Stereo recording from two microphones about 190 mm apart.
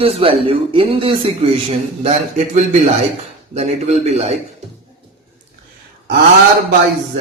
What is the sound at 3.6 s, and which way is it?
Speech, 35° right (ahead or behind).